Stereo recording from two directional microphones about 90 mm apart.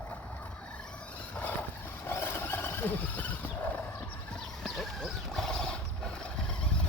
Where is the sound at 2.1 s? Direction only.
25° left (ahead or behind).